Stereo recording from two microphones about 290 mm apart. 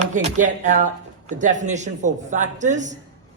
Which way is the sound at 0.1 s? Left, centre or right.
Right.